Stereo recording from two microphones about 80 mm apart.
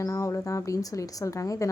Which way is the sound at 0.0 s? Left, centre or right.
Left.